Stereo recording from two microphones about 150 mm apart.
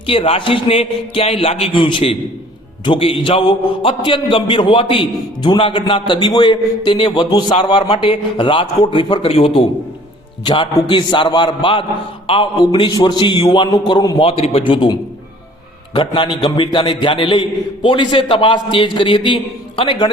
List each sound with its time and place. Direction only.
0.1 s a man's voice: 40° left (ahead or behind)
14.2 s a man's voice: 40° left (ahead or behind)
16.0 s a man's voice: 35° left (ahead or behind)